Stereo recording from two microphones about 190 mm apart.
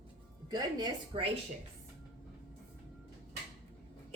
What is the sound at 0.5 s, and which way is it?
Speech, 25° right (ahead or behind).